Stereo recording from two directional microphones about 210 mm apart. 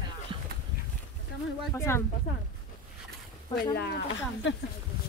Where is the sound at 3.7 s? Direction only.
50° left (ahead or behind).